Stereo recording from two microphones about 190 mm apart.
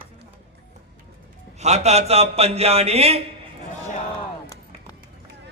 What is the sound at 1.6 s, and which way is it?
A man's voice, 35° right (ahead or behind).